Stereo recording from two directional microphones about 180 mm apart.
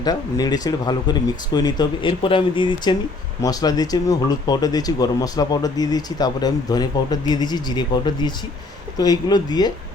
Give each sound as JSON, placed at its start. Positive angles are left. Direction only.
{"t": 0.0, "sound": "speech", "side_deg": 20}